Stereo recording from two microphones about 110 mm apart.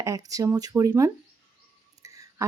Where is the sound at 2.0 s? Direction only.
30° right (ahead or behind).